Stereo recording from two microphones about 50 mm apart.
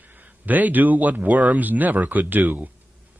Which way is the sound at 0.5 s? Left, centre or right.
Right.